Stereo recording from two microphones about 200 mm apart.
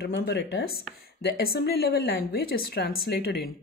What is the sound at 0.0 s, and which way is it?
A woman's voice, 55° left (ahead or behind).